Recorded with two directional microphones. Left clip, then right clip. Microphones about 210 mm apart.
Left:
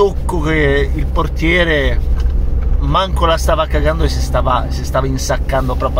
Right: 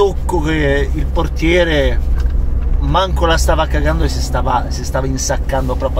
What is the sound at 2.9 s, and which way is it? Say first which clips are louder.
Speech: even; 5° left (ahead or behind).